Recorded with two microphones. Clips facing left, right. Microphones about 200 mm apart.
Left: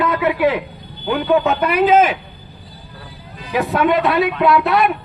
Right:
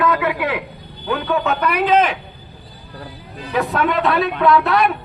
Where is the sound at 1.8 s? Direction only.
5° left (ahead or behind).